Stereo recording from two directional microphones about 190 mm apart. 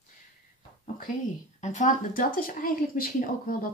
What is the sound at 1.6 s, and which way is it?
Speech, 40° left (ahead or behind).